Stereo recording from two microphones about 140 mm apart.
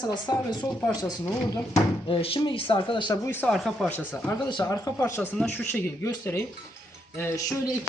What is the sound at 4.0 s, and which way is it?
Speech, 10° left (ahead or behind).